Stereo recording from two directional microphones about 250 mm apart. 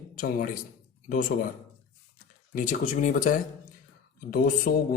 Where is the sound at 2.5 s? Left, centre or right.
Left.